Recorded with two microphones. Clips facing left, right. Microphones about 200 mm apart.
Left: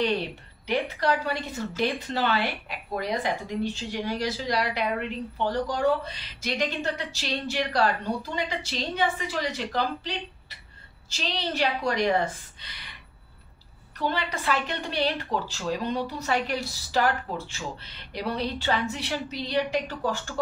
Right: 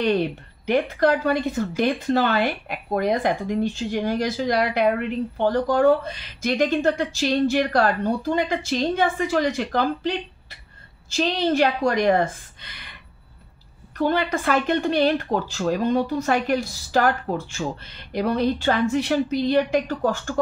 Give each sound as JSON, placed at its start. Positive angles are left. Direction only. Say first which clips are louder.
{"t": 0.0, "sound": "speech", "louder": "right 5 dB", "side_deg": -55}
{"t": 13.9, "sound": "speech", "louder": "right 7 dB", "side_deg": -50}